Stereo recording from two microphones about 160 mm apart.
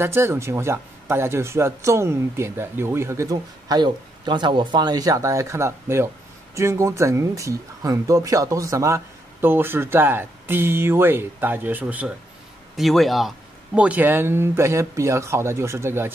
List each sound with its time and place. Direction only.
0.0 s a man's voice: 15° right (ahead or behind)